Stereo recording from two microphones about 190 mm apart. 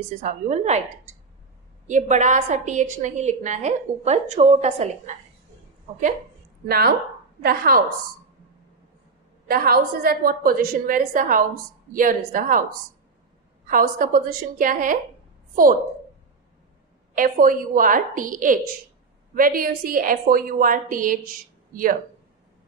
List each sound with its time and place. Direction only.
0.2 s a woman's voice: 40° right (ahead or behind)
1.9 s a woman's voice: 40° right (ahead or behind)
6.7 s a woman's voice: 55° right (ahead or behind)
9.5 s a woman's voice: 50° right (ahead or behind)
13.7 s a woman's voice: 45° right (ahead or behind)
17.1 s a woman's voice: 45° right (ahead or behind)